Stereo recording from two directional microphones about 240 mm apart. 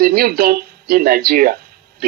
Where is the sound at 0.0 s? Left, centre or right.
Right.